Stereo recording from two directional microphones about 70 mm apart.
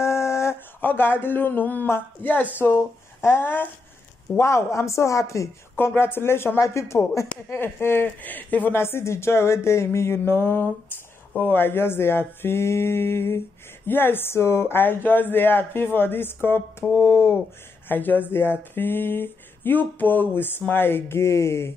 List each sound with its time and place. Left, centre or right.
0.0 s a sound: left
0.7 s speech: left
4.4 s speech: left
5.8 s speech: left
7.4 s speech: left
8.7 s speech: left
17.8 s speech: left